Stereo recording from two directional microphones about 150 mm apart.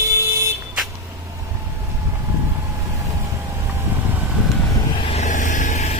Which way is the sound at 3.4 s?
15° right (ahead or behind).